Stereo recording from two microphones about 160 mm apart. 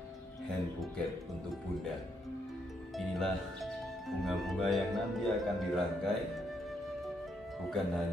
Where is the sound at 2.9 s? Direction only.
Centre (ahead or behind).